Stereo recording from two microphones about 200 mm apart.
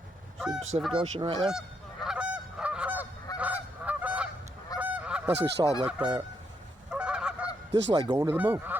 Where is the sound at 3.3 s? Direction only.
15° left (ahead or behind).